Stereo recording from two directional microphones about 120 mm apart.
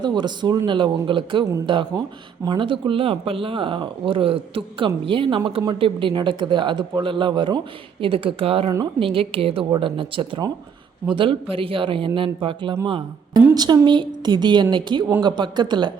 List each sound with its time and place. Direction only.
0.0 s a woman's voice: 40° right (ahead or behind)
12.8 s a woman's voice: 35° right (ahead or behind)